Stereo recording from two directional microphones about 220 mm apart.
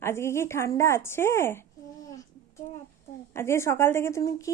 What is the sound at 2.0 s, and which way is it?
Child singing, 15° left (ahead or behind).